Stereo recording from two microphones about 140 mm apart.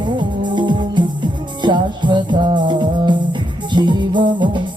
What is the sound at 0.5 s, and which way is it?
Music, 35° right (ahead or behind).